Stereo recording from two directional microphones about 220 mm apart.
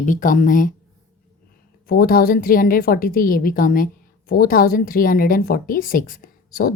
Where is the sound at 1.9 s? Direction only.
40° left (ahead or behind).